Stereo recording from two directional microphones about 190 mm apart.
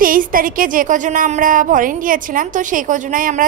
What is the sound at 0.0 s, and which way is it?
Speech, 45° right (ahead or behind).